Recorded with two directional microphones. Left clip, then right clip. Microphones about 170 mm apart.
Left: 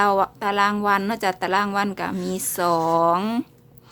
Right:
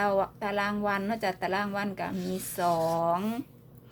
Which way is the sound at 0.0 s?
30° left (ahead or behind).